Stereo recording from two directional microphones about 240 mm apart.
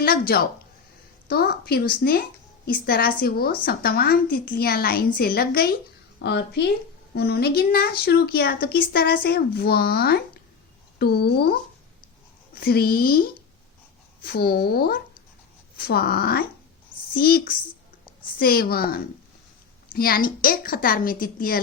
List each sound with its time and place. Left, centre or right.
0.0 s a woman's voice: left
12.5 s speech: left
14.3 s a child's voice: left